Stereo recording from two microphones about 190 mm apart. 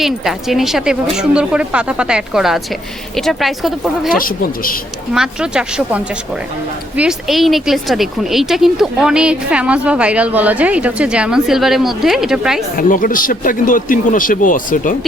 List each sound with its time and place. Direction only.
0.0 s speech: centre (ahead or behind)
4.1 s speech: 50° left (ahead or behind)
5.1 s speech: 5° right (ahead or behind)
12.7 s speech: 45° left (ahead or behind)